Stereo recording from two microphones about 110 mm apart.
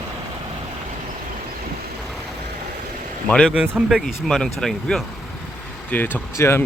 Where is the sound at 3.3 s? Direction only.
10° left (ahead or behind).